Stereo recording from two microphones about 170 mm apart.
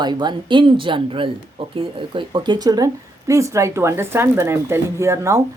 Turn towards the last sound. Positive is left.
turn(degrees=-20)  # may be behind; listen again after turning